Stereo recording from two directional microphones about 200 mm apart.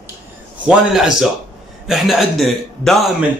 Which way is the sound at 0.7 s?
Centre (ahead or behind).